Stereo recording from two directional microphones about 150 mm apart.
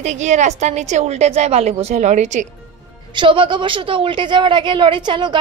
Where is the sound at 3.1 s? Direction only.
35° right (ahead or behind).